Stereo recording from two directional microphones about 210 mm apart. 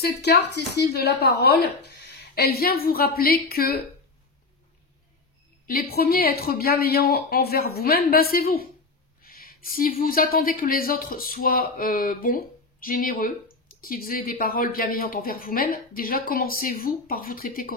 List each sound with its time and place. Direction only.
0.0 s speech: 50° left (ahead or behind)
5.7 s speech: 45° left (ahead or behind)